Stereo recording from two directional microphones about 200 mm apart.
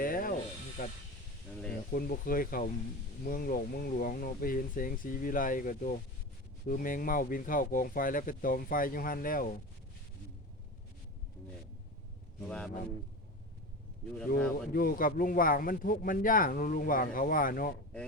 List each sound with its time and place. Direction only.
0.0 s snake: 45° left (ahead or behind)
0.8 s a man's voice: 50° left (ahead or behind)
12.5 s speech: 5° left (ahead or behind)
14.3 s speech: 5° left (ahead or behind)
14.7 s a man's voice: 45° left (ahead or behind)